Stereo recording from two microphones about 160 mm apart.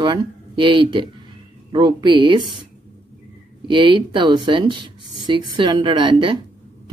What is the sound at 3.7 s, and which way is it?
Speech, 30° right (ahead or behind).